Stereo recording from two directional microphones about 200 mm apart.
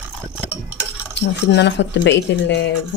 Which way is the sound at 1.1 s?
60° left (ahead or behind).